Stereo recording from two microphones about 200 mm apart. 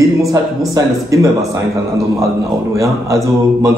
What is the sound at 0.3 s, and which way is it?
A man's voice, 15° right (ahead or behind).